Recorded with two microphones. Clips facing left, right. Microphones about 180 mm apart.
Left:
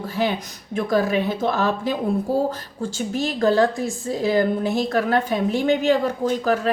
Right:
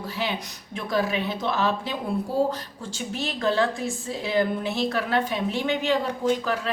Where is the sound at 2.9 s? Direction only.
40° left (ahead or behind).